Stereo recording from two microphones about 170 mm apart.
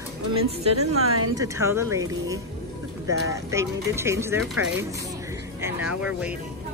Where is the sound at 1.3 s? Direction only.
20° right (ahead or behind).